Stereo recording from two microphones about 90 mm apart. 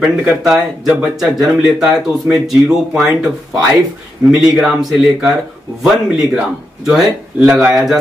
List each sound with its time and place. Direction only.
0.0 s speech: 10° right (ahead or behind)